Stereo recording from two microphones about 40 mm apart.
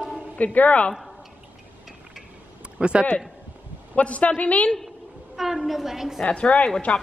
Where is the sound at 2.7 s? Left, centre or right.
Right.